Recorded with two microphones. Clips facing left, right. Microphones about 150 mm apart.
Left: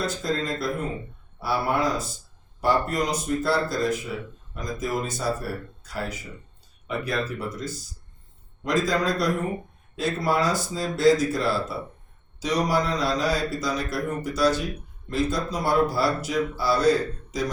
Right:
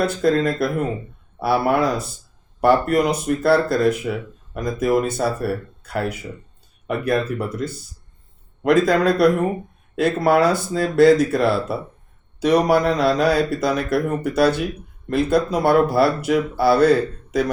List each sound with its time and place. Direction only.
0.0 s speech: 60° right (ahead or behind)